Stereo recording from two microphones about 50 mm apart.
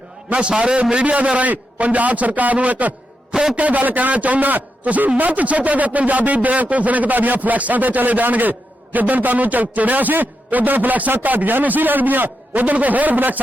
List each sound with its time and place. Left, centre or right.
0.3 s a man's voice: right